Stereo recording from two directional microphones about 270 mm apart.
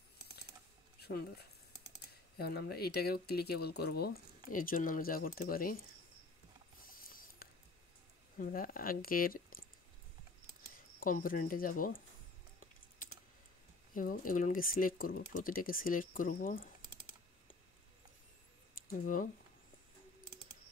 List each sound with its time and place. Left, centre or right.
0.9 s speech: left
7.1 s a sound: left
8.4 s speech: left
11.0 s speech: left
13.9 s speech: left
16.8 s computer keyboard: centre
18.9 s speech: left